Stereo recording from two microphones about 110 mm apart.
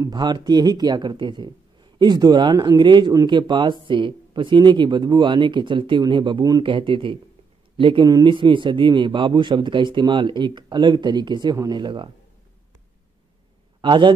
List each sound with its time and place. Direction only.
0.0 s speech: 40° right (ahead or behind)
13.7 s a man's voice: 45° right (ahead or behind)